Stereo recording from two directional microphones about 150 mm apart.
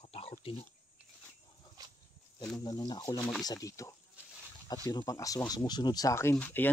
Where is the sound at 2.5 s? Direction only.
30° left (ahead or behind).